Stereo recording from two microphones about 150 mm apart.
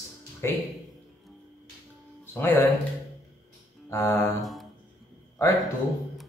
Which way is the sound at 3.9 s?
20° left (ahead or behind).